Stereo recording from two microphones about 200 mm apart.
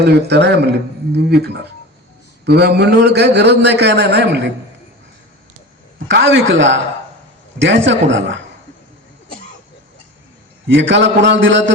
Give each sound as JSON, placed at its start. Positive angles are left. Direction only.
{"t": 0.0, "sound": "a man's voice", "side_deg": -55}
{"t": 6.1, "sound": "a man's voice", "side_deg": -65}
{"t": 10.7, "sound": "a man's voice", "side_deg": -65}